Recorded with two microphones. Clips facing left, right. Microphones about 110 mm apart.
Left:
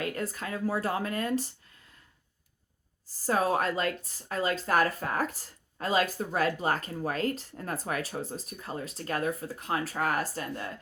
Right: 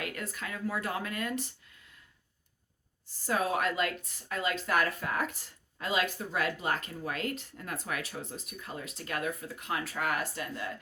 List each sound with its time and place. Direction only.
0.0 s speech: 35° left (ahead or behind)
3.1 s speech: 35° left (ahead or behind)